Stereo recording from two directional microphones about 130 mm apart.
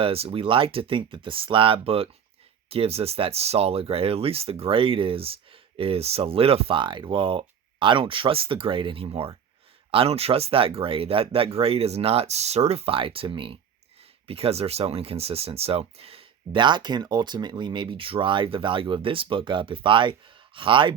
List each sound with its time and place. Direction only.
0.0 s speech: 45° right (ahead or behind)